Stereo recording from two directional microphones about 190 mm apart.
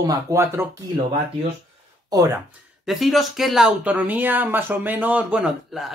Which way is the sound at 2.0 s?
15° right (ahead or behind).